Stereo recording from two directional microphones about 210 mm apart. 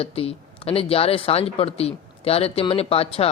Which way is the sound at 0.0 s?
30° left (ahead or behind).